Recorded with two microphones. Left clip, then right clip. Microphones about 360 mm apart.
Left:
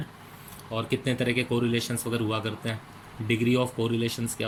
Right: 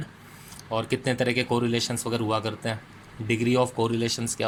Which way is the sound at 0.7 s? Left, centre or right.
Centre.